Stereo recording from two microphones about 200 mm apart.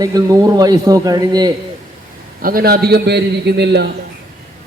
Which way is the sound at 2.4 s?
50° right (ahead or behind).